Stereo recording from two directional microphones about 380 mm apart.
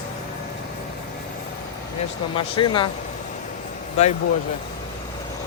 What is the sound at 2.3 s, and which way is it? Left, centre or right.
Speech, centre.